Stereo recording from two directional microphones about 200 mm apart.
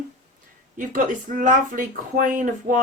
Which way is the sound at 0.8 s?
40° right (ahead or behind).